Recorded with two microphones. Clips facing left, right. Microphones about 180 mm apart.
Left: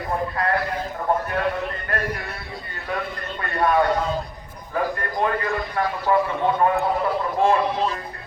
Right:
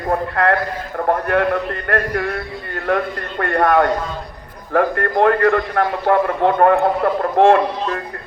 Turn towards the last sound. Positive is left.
turn(degrees=-70)  # may be behind; listen again after turning